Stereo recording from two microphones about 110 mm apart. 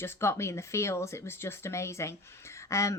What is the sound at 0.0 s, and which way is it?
Speech, 25° left (ahead or behind).